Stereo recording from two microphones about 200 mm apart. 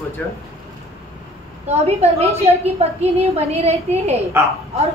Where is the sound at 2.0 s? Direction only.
30° right (ahead or behind).